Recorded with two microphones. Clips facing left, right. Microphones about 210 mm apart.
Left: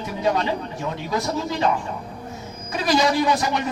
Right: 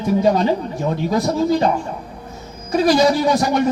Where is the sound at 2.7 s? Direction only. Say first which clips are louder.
Right 6 dB; 40° right (ahead or behind).